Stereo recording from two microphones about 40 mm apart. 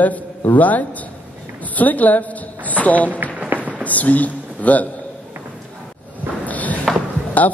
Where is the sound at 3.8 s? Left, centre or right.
Left.